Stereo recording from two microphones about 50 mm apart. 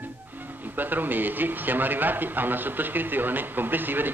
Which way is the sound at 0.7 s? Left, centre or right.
Right.